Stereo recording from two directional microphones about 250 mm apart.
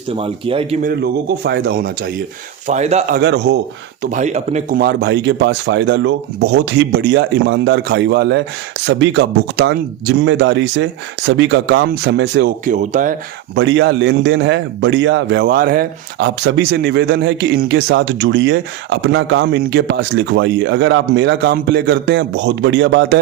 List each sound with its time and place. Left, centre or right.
0.1 s speech: right
2.6 s speech: right
3.2 s a man's voice: right
4.0 s a man's voice: right
12.6 s speech: right
13.6 s a man's voice: right